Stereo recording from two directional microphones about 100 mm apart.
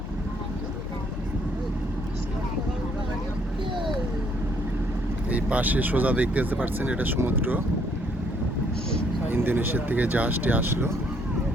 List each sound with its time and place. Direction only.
5.3 s speech: 15° right (ahead or behind)
9.3 s speech: 20° right (ahead or behind)